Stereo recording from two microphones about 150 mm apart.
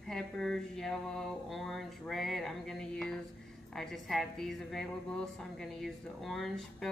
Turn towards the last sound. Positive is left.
turn(degrees=0)  # may be behind; listen again after turning